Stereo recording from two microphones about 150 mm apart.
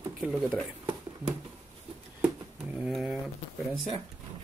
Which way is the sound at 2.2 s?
10° right (ahead or behind).